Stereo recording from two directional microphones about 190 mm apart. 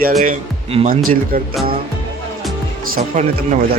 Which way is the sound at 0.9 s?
50° right (ahead or behind).